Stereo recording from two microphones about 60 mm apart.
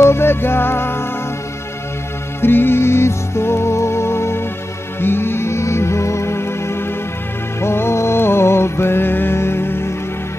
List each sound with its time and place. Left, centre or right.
0.0 s music: left
2.4 s music: left